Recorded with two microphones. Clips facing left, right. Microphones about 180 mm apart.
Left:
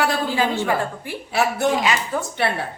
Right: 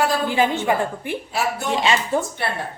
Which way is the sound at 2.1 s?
25° right (ahead or behind).